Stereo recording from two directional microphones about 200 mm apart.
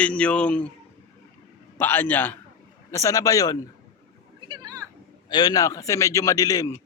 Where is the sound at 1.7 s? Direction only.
10° left (ahead or behind).